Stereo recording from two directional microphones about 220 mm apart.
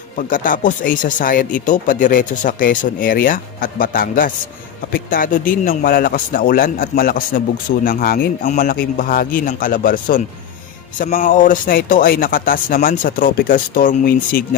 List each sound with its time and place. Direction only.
0.2 s speech: 40° left (ahead or behind)